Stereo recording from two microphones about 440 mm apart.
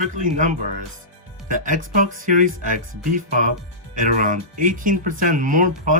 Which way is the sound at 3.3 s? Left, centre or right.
Right.